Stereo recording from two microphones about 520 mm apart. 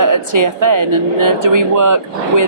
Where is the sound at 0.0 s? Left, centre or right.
Right.